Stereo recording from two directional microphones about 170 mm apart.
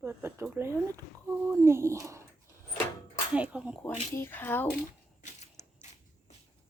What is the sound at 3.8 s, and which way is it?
Speech, 15° left (ahead or behind).